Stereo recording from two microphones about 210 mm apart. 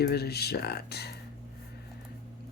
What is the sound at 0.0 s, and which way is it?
Speech, 50° left (ahead or behind).